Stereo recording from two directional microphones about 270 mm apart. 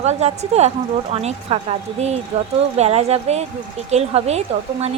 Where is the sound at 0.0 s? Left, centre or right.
Right.